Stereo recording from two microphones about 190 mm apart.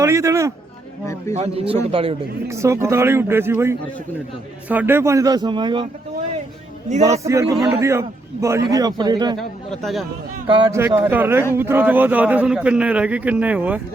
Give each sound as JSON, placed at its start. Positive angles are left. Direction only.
{"t": 0.0, "sound": "a man's voice", "side_deg": -15}
{"t": 1.3, "sound": "a man's voice", "side_deg": -30}
{"t": 2.5, "sound": "a man's voice", "side_deg": -15}
{"t": 7.0, "sound": "a man's voice", "side_deg": -15}
{"t": 9.4, "sound": "a man's voice", "side_deg": 0}
{"t": 10.4, "sound": "a man's voice", "side_deg": -25}
{"t": 10.8, "sound": "a man's voice", "side_deg": -10}